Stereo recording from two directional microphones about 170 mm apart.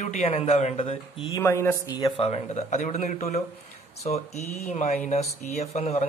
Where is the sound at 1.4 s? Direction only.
15° left (ahead or behind).